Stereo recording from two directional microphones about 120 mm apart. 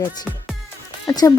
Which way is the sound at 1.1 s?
30° left (ahead or behind).